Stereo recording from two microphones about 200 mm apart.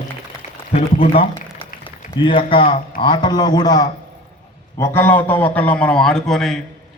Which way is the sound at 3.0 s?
20° left (ahead or behind).